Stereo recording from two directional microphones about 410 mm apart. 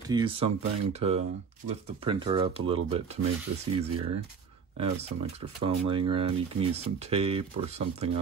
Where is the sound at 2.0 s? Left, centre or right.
Centre.